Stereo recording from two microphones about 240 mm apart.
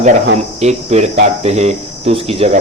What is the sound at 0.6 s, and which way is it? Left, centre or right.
Speech, right.